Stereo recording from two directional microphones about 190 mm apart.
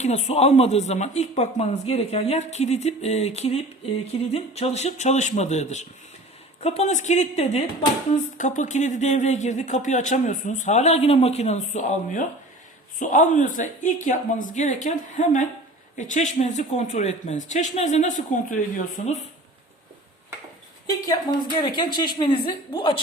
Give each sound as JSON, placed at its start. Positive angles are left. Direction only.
{"t": 0.0, "sound": "speech", "side_deg": 35}
{"t": 21.2, "sound": "speech", "side_deg": 20}